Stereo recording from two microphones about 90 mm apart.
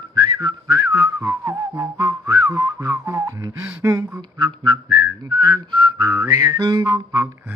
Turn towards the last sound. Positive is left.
turn(degrees=-55)  # may be behind; listen again after turning